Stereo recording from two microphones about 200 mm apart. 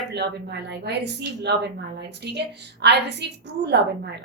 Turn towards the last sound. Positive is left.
turn(degrees=-55)  # may be behind; listen again after turning